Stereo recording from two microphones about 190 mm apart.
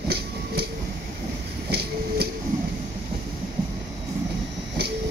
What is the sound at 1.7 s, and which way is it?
Train, 55° right (ahead or behind).